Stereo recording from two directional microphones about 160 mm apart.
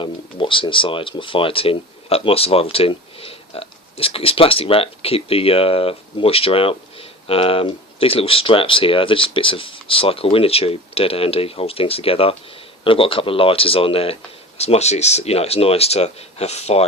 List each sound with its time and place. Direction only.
0.0 s speech: 30° left (ahead or behind)